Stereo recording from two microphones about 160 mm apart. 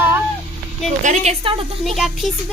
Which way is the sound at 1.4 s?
35° right (ahead or behind).